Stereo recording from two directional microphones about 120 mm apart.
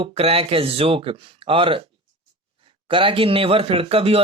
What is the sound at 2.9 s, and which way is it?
Speech, 45° right (ahead or behind).